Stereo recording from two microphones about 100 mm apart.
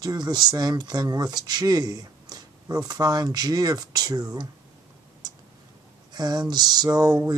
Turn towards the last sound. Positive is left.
turn(degrees=-40)  # may be behind; listen again after turning